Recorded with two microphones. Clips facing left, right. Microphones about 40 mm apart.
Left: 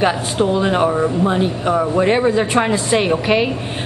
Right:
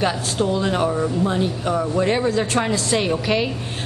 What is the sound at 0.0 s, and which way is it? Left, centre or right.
A woman's voice, left.